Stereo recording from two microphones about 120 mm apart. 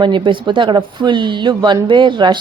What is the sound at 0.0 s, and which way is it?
A woman's voice, 40° right (ahead or behind).